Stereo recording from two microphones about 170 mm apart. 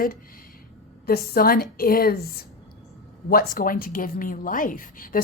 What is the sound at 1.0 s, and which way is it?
Speech, 65° left (ahead or behind).